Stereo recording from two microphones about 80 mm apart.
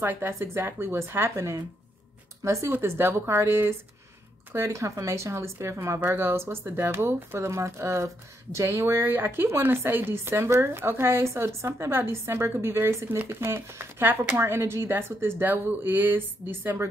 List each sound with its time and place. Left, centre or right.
0.0 s speech: right
2.7 s speech: right